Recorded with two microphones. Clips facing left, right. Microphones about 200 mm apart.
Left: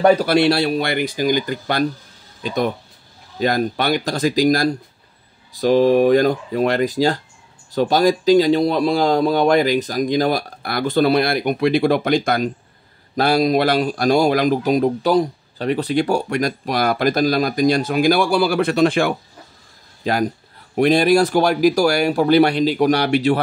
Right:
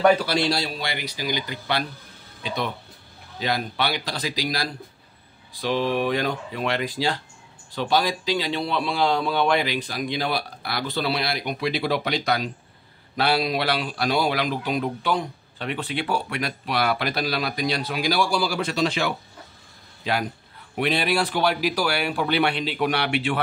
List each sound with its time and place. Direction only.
0.0 s speech: 35° left (ahead or behind)
0.3 s speech: 60° left (ahead or behind); by 23.4 s 40° left (ahead or behind)